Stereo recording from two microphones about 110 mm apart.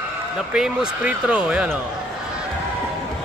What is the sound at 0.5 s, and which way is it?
Speech, 10° right (ahead or behind).